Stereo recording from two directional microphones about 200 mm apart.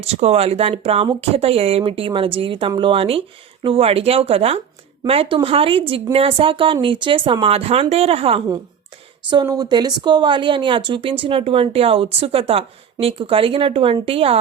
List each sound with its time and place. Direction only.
0.0 s speech: 30° right (ahead or behind)